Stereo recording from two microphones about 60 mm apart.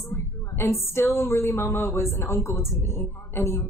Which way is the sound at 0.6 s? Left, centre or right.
Left.